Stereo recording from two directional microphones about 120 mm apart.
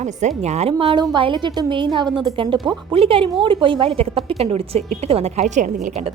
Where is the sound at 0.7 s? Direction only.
45° right (ahead or behind); by 6.1 s 80° right.